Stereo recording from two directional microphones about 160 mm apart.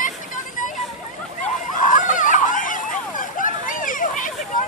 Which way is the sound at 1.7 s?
55° left (ahead or behind).